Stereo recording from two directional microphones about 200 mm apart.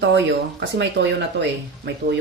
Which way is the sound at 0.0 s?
65° right (ahead or behind).